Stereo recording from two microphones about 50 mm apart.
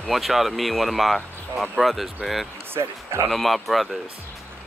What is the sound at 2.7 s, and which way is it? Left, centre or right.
Speech, right.